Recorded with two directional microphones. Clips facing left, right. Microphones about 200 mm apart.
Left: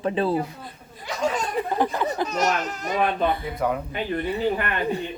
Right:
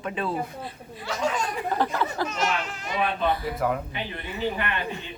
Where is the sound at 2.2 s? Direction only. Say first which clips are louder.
Left 4 dB; 40° left (ahead or behind).